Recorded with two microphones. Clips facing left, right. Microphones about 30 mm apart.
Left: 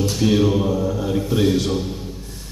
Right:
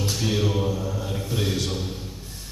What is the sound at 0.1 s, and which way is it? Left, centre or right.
Speech, centre.